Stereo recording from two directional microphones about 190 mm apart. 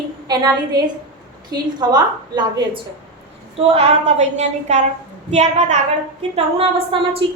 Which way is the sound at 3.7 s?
35° right (ahead or behind).